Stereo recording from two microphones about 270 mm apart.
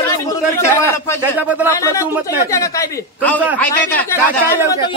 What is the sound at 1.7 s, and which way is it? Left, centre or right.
Speech, centre.